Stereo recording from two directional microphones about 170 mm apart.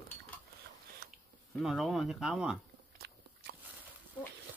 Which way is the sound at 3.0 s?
70° right (ahead or behind).